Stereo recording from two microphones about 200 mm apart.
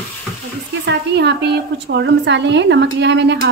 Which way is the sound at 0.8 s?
60° right (ahead or behind).